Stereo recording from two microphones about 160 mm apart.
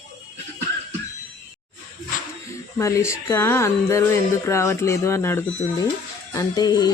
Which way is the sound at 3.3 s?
15° left (ahead or behind).